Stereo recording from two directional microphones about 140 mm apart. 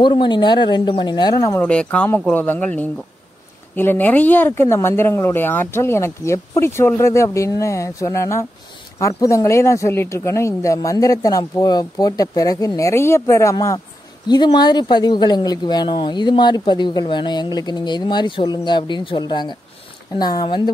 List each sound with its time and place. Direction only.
0.0 s speech: 35° left (ahead or behind)
1.6 s speech: 10° left (ahead or behind); by 20.7 s 35° left (ahead or behind)